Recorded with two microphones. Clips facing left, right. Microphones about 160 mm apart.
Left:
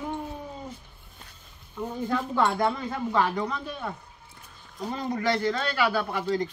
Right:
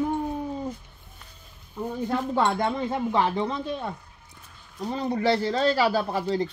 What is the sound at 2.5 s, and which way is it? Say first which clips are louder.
Speech: right 1 dB; 25° right (ahead or behind).